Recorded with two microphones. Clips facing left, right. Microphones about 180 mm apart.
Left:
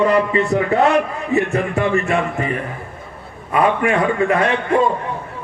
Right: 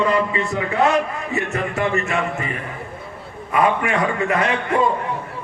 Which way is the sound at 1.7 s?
35° left (ahead or behind).